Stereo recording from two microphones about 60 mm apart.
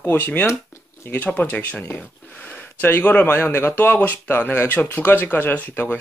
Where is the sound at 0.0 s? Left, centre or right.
Left.